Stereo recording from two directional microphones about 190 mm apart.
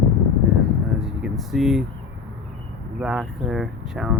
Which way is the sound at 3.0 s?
5° right (ahead or behind).